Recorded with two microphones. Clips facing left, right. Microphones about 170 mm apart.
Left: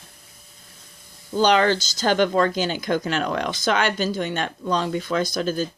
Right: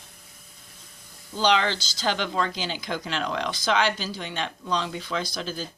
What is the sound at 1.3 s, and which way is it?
Speech, 50° left (ahead or behind).